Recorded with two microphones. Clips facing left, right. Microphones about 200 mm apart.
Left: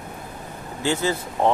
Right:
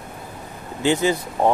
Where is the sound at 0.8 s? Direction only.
15° right (ahead or behind).